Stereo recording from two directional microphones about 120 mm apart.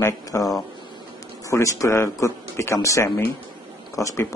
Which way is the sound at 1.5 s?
25° left (ahead or behind).